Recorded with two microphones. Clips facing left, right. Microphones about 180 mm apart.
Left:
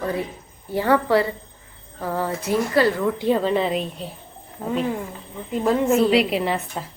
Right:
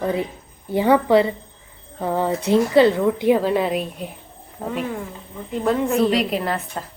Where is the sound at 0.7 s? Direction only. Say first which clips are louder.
Right 3 dB; 15° right (ahead or behind).